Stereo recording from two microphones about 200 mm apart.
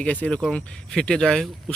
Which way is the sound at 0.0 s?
5° left (ahead or behind).